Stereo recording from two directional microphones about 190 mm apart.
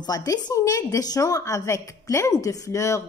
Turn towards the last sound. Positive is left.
turn(degrees=15)  # may be behind; listen again after turning